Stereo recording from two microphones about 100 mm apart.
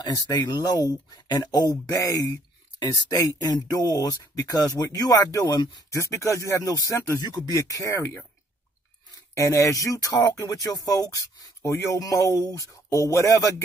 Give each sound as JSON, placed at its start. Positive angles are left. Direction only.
{"t": 0.3, "sound": "speech", "side_deg": 40}
{"t": 9.3, "sound": "speech", "side_deg": 30}